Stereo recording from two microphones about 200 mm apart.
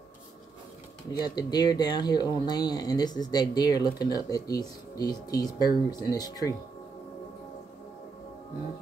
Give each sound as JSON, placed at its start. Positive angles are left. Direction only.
{"t": 1.1, "sound": "speech", "side_deg": 20}